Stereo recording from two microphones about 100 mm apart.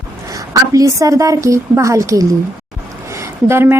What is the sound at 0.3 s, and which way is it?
A woman's voice, 35° right (ahead or behind).